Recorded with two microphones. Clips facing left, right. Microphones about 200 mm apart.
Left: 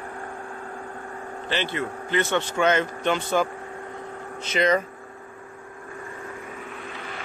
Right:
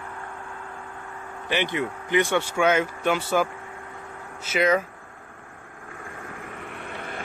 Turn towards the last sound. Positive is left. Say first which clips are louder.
# right 1 dB
turn(degrees=-50)  # may be behind; listen again after turning